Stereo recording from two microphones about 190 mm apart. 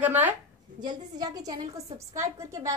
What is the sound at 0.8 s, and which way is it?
A woman's voice, 20° right (ahead or behind).